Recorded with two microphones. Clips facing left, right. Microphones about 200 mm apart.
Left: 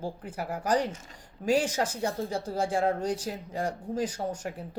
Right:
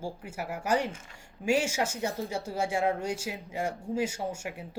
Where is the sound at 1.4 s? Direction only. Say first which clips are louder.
Left 1 dB; 35° left (ahead or behind).